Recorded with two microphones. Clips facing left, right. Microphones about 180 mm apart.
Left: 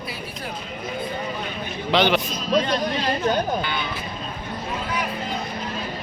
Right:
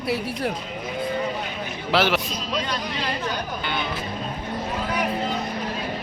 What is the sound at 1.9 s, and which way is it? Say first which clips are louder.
Speech: left 2 dB; 5° right (ahead or behind).